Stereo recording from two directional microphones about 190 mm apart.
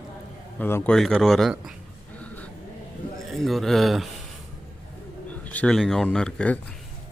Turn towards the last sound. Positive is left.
turn(degrees=5)  # may be behind; listen again after turning